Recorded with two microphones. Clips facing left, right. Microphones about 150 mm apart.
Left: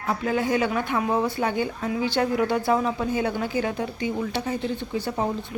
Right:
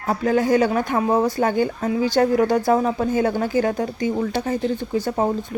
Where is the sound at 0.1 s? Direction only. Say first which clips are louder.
Right 6 dB; 40° right (ahead or behind).